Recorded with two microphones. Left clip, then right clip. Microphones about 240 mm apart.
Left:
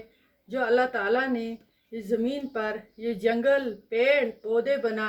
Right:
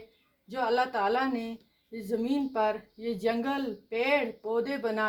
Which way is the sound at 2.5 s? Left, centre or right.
Right.